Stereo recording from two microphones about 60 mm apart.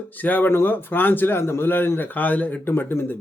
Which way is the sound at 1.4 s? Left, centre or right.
Left.